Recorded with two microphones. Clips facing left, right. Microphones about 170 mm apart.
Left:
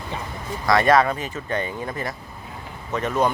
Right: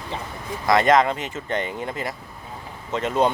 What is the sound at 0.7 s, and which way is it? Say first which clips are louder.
Speech: even; 20° right (ahead or behind).